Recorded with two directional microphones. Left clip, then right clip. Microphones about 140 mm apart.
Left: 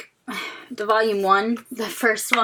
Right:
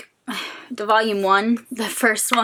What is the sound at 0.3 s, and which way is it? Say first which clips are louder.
A woman's voice: right 2 dB; 30° right (ahead or behind).